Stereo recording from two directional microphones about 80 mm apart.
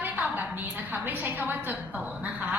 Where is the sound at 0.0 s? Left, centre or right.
Right.